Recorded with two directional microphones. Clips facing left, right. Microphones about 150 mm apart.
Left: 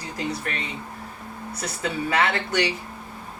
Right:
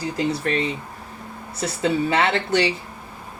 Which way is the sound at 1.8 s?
25° right (ahead or behind).